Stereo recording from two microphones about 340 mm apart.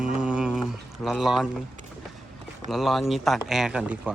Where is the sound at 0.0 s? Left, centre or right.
Centre.